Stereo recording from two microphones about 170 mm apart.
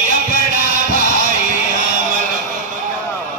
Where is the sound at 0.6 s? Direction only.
50° right (ahead or behind).